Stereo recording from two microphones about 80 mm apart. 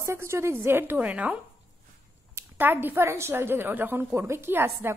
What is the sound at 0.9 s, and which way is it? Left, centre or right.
Speech, centre.